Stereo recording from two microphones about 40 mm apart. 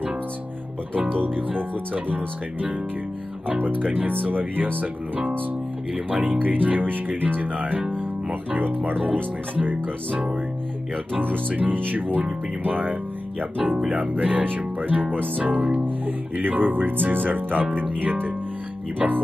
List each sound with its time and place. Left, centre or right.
2.0 s speech: right
6.0 s music: right
6.4 s speech: right
11.1 s speech: right
18.9 s speech: right